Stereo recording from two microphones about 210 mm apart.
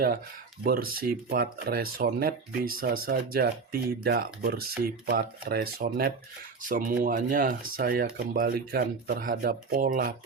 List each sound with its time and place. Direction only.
0.6 s speech: 45° right (ahead or behind)